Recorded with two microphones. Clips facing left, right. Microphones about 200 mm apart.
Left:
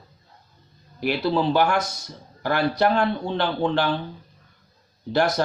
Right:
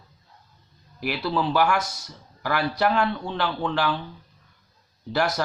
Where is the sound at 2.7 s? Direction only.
25° left (ahead or behind).